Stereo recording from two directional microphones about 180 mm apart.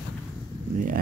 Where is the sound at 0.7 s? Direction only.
50° right (ahead or behind).